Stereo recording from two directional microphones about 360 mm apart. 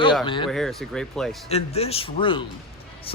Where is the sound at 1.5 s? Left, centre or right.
Centre.